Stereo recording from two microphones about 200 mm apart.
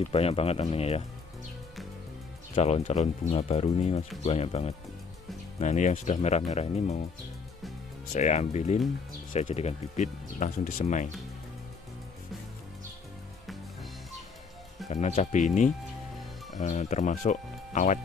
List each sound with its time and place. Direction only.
0.1 s speech: 30° left (ahead or behind)
2.5 s speech: 30° left (ahead or behind)
8.1 s speech: 35° left (ahead or behind)
14.9 s speech: 35° left (ahead or behind)